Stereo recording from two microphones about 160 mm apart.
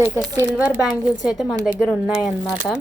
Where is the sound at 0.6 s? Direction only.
10° right (ahead or behind).